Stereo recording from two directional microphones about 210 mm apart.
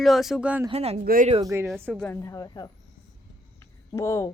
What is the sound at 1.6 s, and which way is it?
Speech, centre (ahead or behind).